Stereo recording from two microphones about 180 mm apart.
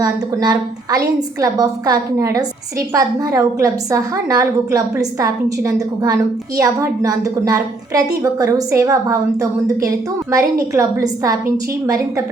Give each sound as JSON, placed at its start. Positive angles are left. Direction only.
{"t": 0.0, "sound": "a woman's voice", "side_deg": -20}